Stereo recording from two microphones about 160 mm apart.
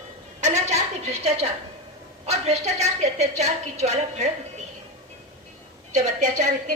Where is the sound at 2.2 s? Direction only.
40° right (ahead or behind).